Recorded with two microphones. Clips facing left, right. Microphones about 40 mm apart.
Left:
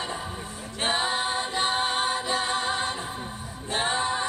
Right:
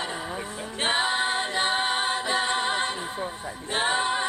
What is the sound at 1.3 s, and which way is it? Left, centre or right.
A capella, right.